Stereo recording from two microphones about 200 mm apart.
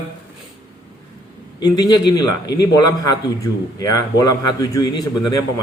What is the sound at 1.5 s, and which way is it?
A man's voice, 20° left (ahead or behind).